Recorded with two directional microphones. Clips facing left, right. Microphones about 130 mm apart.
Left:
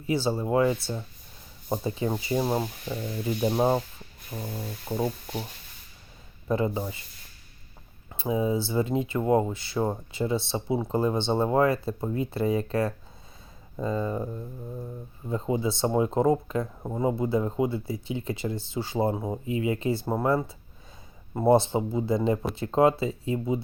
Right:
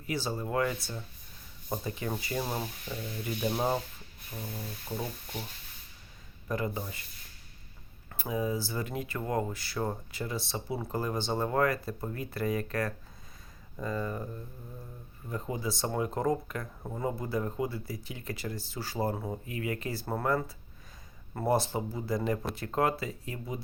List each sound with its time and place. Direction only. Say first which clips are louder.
0.0 s speech: left 7 dB; 25° left (ahead or behind)
6.5 s speech: left 7 dB; 25° left (ahead or behind)
8.1 s speech: left 6 dB; 25° left (ahead or behind)
15.3 s speech: left 7 dB; 25° left (ahead or behind)